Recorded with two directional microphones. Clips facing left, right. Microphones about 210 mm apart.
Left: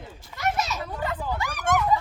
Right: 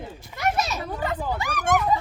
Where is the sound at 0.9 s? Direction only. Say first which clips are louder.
Right 3 dB; 15° right (ahead or behind).